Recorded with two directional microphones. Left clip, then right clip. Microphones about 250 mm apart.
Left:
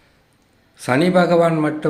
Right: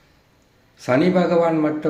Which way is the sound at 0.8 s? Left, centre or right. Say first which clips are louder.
Left 2 dB; centre.